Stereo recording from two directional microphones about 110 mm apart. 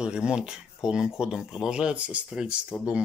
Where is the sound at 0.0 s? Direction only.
10° right (ahead or behind).